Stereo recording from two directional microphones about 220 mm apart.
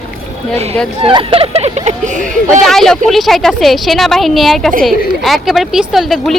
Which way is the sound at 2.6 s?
Centre (ahead or behind).